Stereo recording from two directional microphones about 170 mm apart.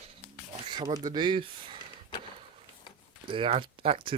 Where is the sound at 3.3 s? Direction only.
30° right (ahead or behind).